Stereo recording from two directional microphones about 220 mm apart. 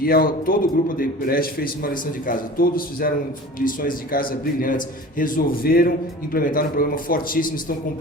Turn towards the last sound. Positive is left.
turn(degrees=40)  # may be behind; listen again after turning